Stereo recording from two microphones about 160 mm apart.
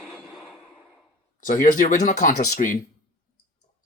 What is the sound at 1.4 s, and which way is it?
Speech, 55° left (ahead or behind).